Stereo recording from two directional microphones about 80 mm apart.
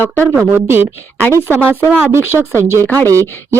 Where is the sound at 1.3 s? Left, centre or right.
Left.